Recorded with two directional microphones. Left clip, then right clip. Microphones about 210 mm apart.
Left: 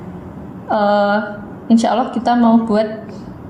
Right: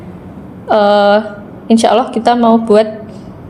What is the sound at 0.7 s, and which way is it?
A woman's voice, 45° right (ahead or behind).